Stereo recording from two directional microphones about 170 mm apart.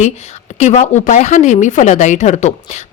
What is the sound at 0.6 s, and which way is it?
A woman's voice, 45° left (ahead or behind).